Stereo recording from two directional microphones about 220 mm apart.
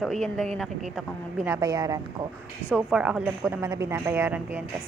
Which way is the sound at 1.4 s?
15° right (ahead or behind).